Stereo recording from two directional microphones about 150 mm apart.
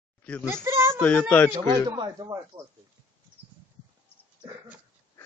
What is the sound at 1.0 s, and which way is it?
Speech, 10° left (ahead or behind).